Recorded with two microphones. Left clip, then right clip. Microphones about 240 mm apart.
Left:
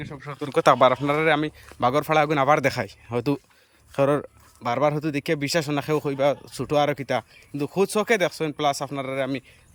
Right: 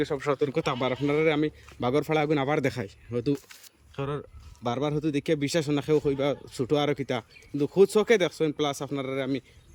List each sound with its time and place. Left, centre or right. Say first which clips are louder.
0.1 s speech: right 10 dB; right
0.5 s speech: left 11 dB; centre
4.6 s speech: left 6 dB; centre